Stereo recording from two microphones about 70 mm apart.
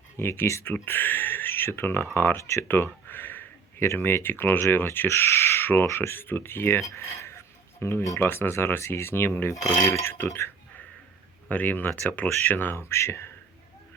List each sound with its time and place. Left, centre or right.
0.2 s speech: left
2.4 s speech: left
2.6 s speech: left
6.9 s a sound: left
8.2 s speech: left
11.4 s speech: left